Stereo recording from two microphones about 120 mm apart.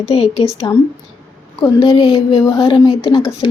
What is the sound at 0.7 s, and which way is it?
Speech, 25° left (ahead or behind).